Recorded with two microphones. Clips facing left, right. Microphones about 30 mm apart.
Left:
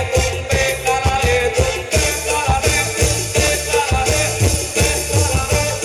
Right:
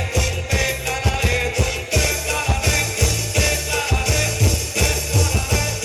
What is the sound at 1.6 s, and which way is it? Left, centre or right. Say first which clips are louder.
Music: left 3 dB; left.